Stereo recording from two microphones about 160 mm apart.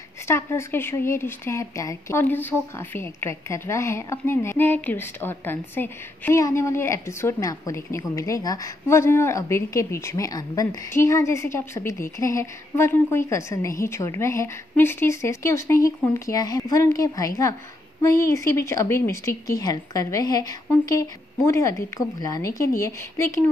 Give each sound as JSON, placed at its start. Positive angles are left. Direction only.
{"t": 0.3, "sound": "a woman's voice", "side_deg": 15}